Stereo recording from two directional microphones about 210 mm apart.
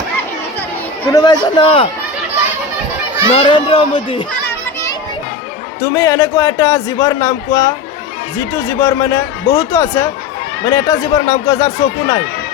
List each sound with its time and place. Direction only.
1.1 s a child's voice: 20° left (ahead or behind)
3.2 s a child's voice: 25° left (ahead or behind)
5.8 s a man's voice: 15° left (ahead or behind)